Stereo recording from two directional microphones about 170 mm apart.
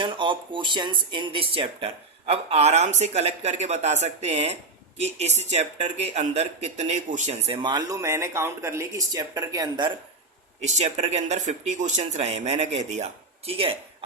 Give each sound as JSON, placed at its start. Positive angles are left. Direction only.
{"t": 0.0, "sound": "speech", "side_deg": -30}
{"t": 10.6, "sound": "speech", "side_deg": -45}